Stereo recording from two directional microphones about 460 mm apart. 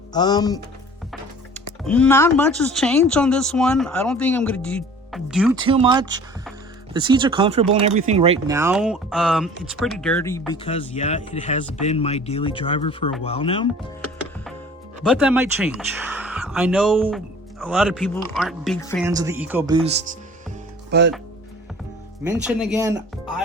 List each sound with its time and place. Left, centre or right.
0.1 s speech: centre
1.8 s speech: centre
15.0 s speech: centre; by 21.1 s right
22.2 s speech: centre